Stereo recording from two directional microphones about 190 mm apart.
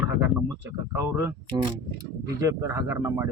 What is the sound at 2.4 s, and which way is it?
Speech, 15° right (ahead or behind).